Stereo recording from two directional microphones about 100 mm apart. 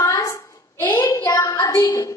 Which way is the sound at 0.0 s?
30° left (ahead or behind).